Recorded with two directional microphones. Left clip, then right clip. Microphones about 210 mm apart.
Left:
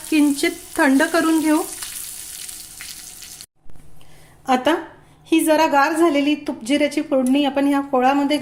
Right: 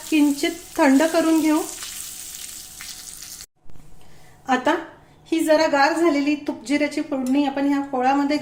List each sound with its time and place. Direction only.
0.1 s frying: 10° left (ahead or behind)
4.4 s a woman's voice: 40° left (ahead or behind)